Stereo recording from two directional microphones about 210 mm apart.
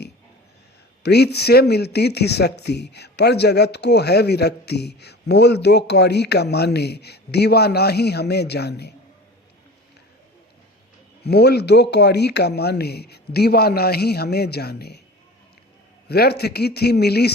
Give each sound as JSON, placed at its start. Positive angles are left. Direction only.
{"t": 1.0, "sound": "speech", "side_deg": 50}
{"t": 11.2, "sound": "speech", "side_deg": 50}
{"t": 16.0, "sound": "speech", "side_deg": 50}